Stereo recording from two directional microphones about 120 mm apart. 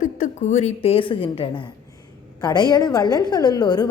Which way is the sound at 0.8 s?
50° left (ahead or behind).